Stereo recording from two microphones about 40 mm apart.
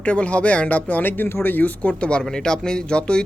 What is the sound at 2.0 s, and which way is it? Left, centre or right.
Speech, left.